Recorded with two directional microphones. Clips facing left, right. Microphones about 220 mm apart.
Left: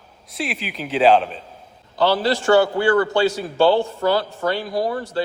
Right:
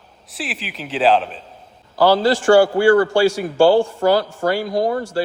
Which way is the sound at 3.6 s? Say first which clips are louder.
Right 3 dB; 50° right (ahead or behind).